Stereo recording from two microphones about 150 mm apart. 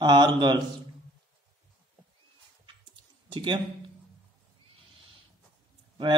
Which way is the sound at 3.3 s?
30° right (ahead or behind).